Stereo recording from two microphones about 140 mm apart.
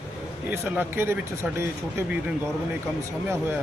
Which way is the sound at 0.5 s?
15° right (ahead or behind).